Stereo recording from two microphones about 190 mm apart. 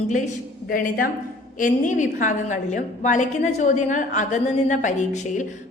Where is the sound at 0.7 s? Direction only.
50° left (ahead or behind).